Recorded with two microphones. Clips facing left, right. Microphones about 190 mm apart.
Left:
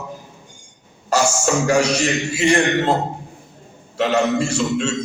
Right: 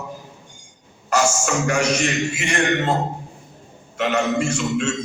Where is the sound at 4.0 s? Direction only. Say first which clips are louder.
Left 3 dB; 30° left (ahead or behind).